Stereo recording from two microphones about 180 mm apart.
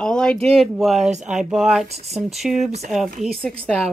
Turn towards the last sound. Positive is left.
turn(degrees=0)  # may be behind; listen again after turning